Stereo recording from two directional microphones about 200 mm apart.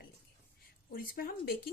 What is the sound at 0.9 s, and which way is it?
Speech, 45° left (ahead or behind).